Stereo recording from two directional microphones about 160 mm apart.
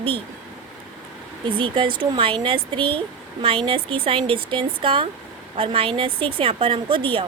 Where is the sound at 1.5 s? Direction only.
30° right (ahead or behind).